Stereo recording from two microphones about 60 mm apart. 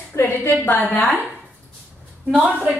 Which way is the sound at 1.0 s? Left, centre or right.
Centre.